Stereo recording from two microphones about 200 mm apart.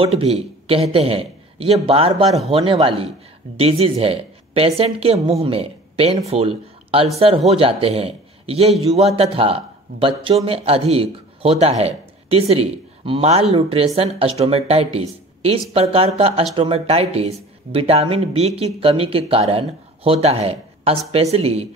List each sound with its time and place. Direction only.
0.0 s speech: 30° right (ahead or behind)